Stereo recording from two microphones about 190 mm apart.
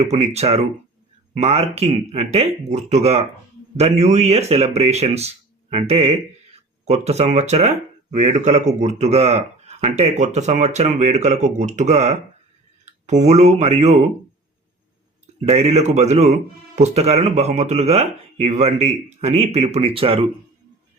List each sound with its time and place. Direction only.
0.0 s speech: 35° right (ahead or behind)
15.4 s speech: 35° right (ahead or behind)